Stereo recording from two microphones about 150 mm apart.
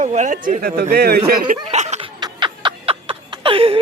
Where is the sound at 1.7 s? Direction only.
50° right (ahead or behind).